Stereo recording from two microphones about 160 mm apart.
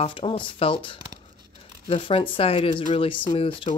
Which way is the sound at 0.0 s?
35° left (ahead or behind).